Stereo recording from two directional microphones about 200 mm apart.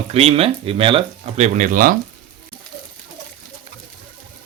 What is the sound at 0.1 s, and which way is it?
Speech, 30° right (ahead or behind).